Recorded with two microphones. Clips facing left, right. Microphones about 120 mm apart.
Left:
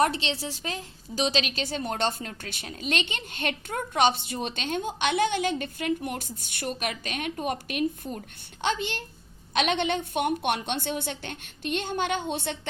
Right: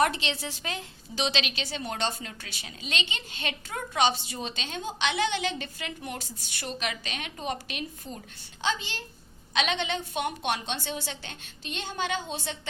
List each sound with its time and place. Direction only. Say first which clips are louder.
0.0 s a woman's voice: left 1 dB; 35° left (ahead or behind); by 12.5 s 60° left (ahead or behind)